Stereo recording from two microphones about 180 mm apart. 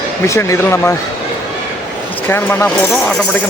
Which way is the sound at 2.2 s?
10° left (ahead or behind).